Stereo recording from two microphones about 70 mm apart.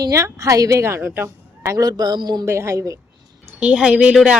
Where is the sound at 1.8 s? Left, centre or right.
Right.